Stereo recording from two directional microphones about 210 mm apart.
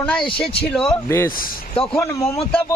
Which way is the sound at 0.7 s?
5° left (ahead or behind).